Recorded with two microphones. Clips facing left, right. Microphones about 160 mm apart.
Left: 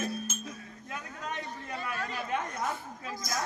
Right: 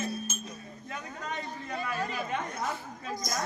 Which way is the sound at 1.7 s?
15° right (ahead or behind).